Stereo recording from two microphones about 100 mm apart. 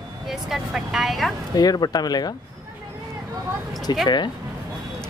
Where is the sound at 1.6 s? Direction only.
40° left (ahead or behind).